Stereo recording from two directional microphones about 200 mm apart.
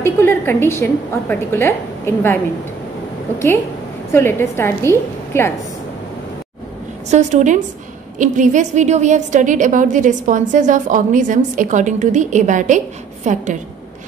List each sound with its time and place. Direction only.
0.0 s a sound: 10° left (ahead or behind)
1.3 s a woman's voice: 10° left (ahead or behind)
4.1 s a woman's voice: 10° left (ahead or behind)
7.1 s a woman's voice: 35° right (ahead or behind)